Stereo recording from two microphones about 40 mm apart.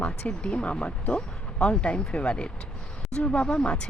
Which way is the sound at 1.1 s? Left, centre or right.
Left.